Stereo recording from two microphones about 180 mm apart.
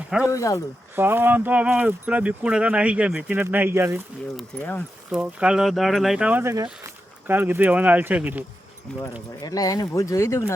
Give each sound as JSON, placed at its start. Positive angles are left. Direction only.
{"t": 0.3, "sound": "speech", "side_deg": 15}
{"t": 0.9, "sound": "speech", "side_deg": -10}
{"t": 4.4, "sound": "speech", "side_deg": 10}
{"t": 5.1, "sound": "speech", "side_deg": -5}
{"t": 8.9, "sound": "speech", "side_deg": 5}
{"t": 9.4, "sound": "speech", "side_deg": 20}